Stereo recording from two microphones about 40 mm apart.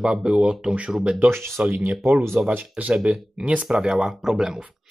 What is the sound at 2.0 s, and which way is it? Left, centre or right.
Speech, right.